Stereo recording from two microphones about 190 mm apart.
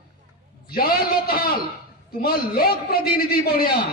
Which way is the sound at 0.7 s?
55° left (ahead or behind).